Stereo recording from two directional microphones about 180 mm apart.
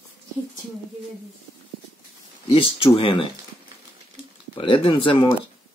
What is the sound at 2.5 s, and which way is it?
Speech, 30° left (ahead or behind).